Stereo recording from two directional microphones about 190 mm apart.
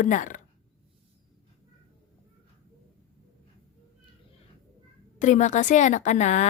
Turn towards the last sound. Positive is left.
turn(degrees=40)  # may be behind; listen again after turning